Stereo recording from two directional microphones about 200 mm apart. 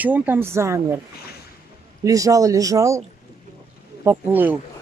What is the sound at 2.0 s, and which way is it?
Speech, 15° right (ahead or behind).